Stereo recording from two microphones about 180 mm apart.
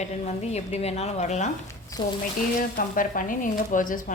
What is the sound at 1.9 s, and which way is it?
Speech, 20° left (ahead or behind).